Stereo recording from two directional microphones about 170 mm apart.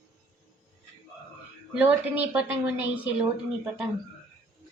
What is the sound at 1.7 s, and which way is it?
A woman's voice, 10° right (ahead or behind).